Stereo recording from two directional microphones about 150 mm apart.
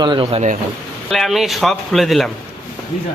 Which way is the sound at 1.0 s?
Centre (ahead or behind).